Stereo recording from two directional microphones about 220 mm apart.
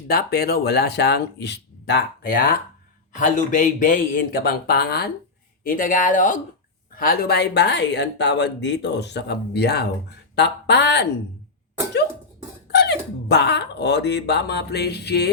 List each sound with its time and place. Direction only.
0.1 s speech: 45° left (ahead or behind)
3.2 s speech: 35° left (ahead or behind)
12.7 s speech: 50° left (ahead or behind)